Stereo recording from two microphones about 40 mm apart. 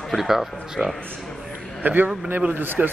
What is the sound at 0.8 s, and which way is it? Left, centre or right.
Speech, right.